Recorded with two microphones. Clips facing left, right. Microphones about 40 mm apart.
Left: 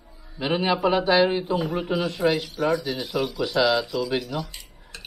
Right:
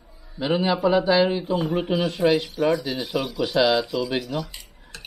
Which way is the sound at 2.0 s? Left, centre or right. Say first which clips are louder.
Right 4 dB; centre.